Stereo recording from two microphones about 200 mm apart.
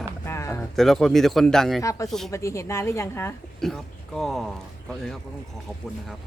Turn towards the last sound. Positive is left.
turn(degrees=0)  # may be behind; listen again after turning